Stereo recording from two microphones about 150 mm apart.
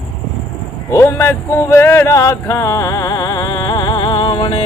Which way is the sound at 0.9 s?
20° left (ahead or behind).